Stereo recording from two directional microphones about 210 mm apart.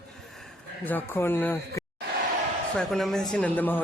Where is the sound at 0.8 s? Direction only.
10° left (ahead or behind).